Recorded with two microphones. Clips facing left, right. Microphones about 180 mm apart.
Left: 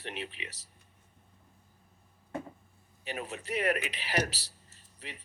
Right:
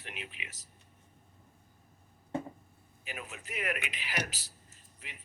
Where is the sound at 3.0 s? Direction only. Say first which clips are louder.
Left 6 dB; 35° left (ahead or behind).